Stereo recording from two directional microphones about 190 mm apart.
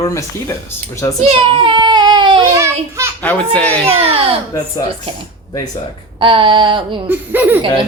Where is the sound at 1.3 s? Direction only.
30° right (ahead or behind).